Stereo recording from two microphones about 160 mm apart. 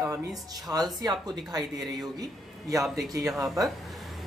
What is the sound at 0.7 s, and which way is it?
A man's voice, 25° right (ahead or behind).